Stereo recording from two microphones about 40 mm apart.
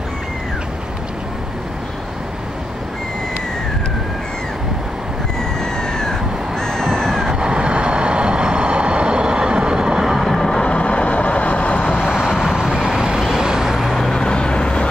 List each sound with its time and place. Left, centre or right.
5.8 s crow: centre
7.3 s vehicle: right
10.3 s vehicle: centre
10.6 s vehicle: left
12.0 s vehicle: centre
14.1 s vehicle: centre